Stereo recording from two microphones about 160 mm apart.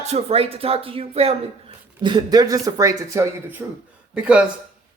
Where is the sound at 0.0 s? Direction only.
40° right (ahead or behind); by 3.6 s 20° right (ahead or behind).